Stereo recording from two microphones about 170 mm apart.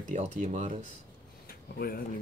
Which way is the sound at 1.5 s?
60° left (ahead or behind).